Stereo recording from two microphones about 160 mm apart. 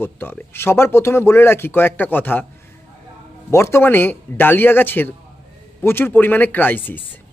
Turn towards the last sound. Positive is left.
turn(degrees=10)  # may be behind; listen again after turning